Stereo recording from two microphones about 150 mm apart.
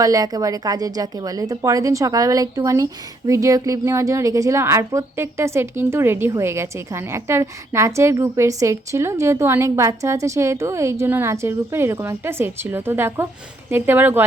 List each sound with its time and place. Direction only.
0.0 s a woman's voice: 25° right (ahead or behind)